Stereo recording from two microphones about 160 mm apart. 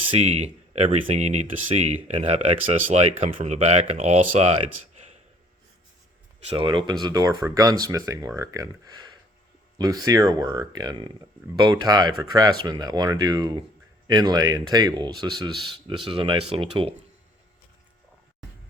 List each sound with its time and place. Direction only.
0.1 s speech: 40° right (ahead or behind)
6.5 s speech: 30° right (ahead or behind)